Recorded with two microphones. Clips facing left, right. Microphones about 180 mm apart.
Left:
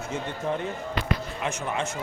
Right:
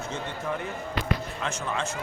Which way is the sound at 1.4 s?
20° left (ahead or behind).